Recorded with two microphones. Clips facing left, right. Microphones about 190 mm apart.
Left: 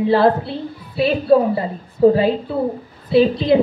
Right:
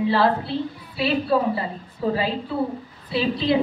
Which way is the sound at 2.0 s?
45° left (ahead or behind).